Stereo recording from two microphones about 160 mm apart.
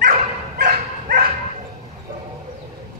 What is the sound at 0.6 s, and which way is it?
Dog, 60° right (ahead or behind).